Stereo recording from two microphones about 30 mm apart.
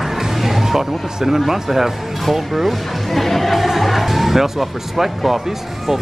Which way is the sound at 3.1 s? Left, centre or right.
Centre.